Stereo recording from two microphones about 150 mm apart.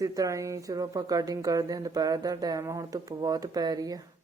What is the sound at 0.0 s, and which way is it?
Speech, 25° right (ahead or behind).